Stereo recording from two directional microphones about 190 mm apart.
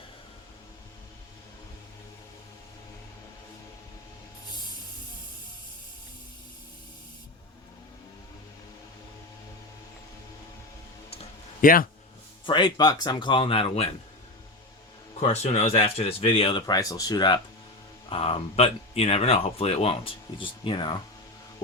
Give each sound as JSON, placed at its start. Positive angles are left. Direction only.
{"t": 11.6, "sound": "speech", "side_deg": 50}
{"t": 12.5, "sound": "speech", "side_deg": 25}
{"t": 15.2, "sound": "speech", "side_deg": 35}